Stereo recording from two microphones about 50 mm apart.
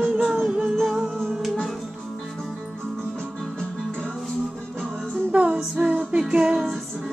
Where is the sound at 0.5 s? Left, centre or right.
Centre.